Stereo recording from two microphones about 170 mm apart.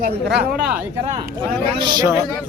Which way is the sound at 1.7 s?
25° right (ahead or behind).